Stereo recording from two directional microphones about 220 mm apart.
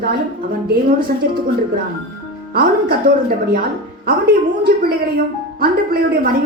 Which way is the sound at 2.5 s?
45° right (ahead or behind).